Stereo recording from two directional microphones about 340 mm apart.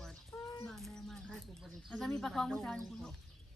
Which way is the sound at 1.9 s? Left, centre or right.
Centre.